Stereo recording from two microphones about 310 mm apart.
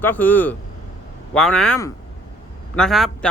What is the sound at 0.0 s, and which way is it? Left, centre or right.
Speech, centre.